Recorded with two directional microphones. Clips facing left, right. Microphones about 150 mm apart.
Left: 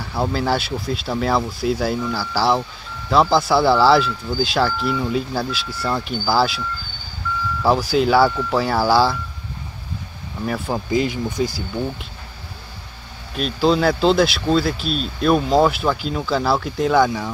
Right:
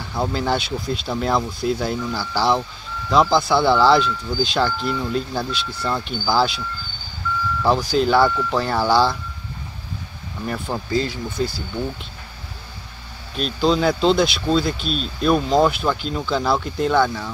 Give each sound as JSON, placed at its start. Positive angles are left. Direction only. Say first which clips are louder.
{"t": 0.1, "sound": "speech", "louder": "left 1 dB", "side_deg": 5}
{"t": 7.6, "sound": "speech", "louder": "left 1 dB", "side_deg": 5}
{"t": 10.4, "sound": "speech", "louder": "left 3 dB", "side_deg": 5}
{"t": 10.9, "sound": "speech", "louder": "left 3 dB", "side_deg": 15}
{"t": 13.3, "sound": "speech", "louder": "left 1 dB", "side_deg": 5}
{"t": 17.0, "sound": "speech", "louder": "left 2 dB", "side_deg": 15}